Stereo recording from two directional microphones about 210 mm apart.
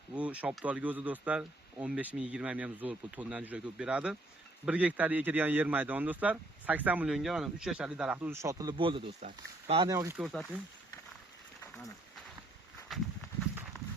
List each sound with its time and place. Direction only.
0.2 s a man's voice: 5° right (ahead or behind); by 9.8 s 30° right (ahead or behind)
9.8 s a man's voice: 15° right (ahead or behind)
10.2 s speech: centre (ahead or behind)
12.9 s a sound: centre (ahead or behind)